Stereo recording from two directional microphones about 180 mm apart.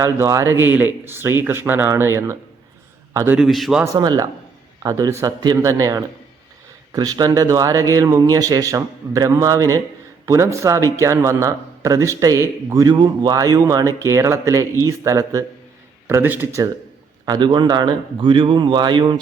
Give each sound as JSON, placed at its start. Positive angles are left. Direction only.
{"t": 0.0, "sound": "a man's voice", "side_deg": -15}
{"t": 3.3, "sound": "a man's voice", "side_deg": 0}
{"t": 3.9, "sound": "a man's voice", "side_deg": -20}